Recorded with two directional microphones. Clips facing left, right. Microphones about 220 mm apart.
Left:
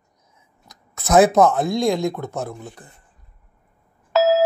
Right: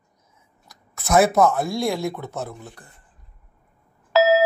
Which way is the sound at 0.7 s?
20° left (ahead or behind).